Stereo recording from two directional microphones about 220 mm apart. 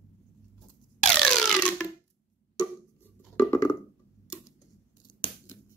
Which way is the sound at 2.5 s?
20° left (ahead or behind).